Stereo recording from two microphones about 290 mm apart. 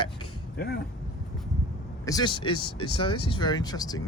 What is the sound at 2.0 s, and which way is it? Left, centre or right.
Speech, centre.